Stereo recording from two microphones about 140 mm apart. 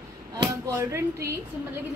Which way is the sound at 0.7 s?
20° right (ahead or behind).